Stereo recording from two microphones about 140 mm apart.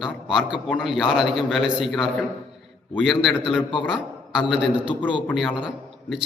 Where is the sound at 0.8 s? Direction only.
5° right (ahead or behind).